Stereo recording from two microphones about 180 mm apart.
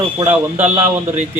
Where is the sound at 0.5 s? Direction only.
10° right (ahead or behind).